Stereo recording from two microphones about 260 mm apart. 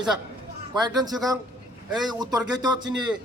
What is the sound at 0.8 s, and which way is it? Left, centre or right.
A man's voice, centre.